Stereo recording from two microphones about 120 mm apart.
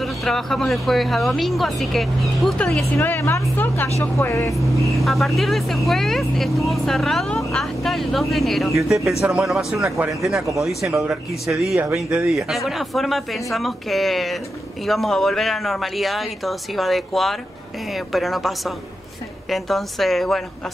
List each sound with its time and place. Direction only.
0.0 s speech: centre (ahead or behind)
3.0 s a woman's voice: 20° left (ahead or behind)
4.6 s speech: centre (ahead or behind)
11.7 s speech: 25° right (ahead or behind)
12.0 s speech: 5° right (ahead or behind)